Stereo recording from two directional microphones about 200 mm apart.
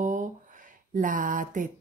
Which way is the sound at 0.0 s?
40° right (ahead or behind).